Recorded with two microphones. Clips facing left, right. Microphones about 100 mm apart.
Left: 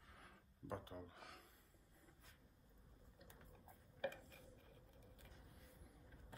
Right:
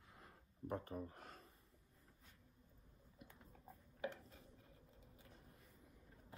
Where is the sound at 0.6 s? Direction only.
35° right (ahead or behind).